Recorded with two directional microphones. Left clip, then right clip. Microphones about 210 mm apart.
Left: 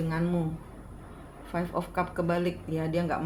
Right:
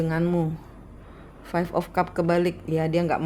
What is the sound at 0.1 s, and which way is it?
Speech, 55° right (ahead or behind).